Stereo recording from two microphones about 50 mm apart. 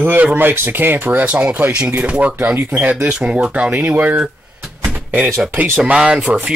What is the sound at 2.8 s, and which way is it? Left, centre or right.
Speech, right.